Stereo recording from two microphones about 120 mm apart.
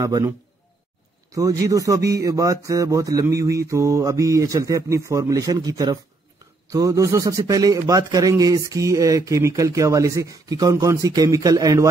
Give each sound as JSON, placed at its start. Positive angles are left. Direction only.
{"t": 0.0, "sound": "a man's voice", "side_deg": -30}
{"t": 1.3, "sound": "a man's voice", "side_deg": -30}